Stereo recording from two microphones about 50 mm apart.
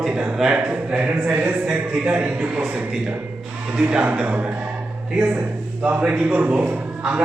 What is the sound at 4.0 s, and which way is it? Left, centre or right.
Speech, right.